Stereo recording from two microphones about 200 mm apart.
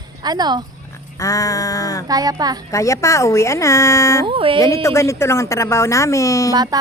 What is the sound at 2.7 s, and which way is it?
Speech, 15° left (ahead or behind).